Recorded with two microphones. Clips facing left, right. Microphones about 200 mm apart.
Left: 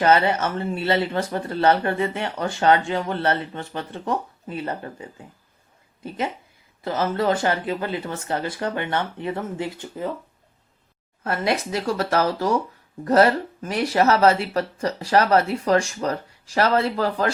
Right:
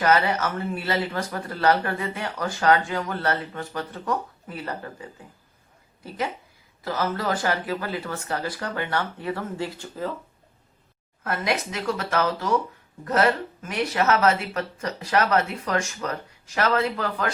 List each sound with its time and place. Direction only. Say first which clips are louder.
0.0 s a woman's voice: left 3 dB; 25° left (ahead or behind)
11.2 s speech: left 3 dB; 30° left (ahead or behind)